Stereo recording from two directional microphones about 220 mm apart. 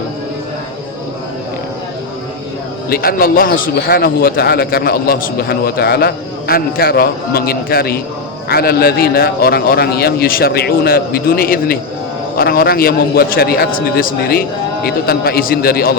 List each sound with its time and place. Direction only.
2.9 s a man's voice: 40° left (ahead or behind)